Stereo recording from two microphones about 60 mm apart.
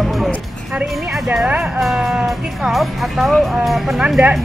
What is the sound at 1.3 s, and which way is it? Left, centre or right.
Speech, centre.